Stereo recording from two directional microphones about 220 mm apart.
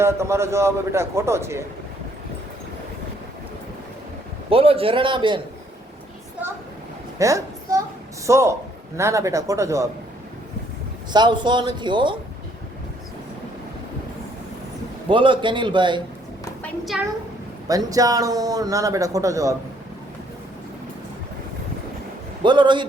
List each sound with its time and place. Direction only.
0.0 s a man's voice: 10° right (ahead or behind)
4.4 s speech: 25° right (ahead or behind)
7.2 s a sound: 15° right (ahead or behind)
8.3 s a man's voice: 15° right (ahead or behind)
11.1 s speech: 20° right (ahead or behind)
15.1 s speech: 20° right (ahead or behind)
16.9 s a woman's voice: centre (ahead or behind)
17.7 s a man's voice: 15° right (ahead or behind)
22.4 s speech: 20° right (ahead or behind)